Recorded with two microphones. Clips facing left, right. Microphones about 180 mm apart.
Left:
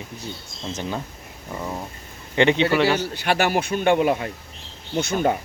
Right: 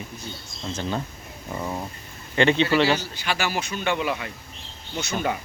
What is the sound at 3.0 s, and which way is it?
A man's voice, 60° left (ahead or behind).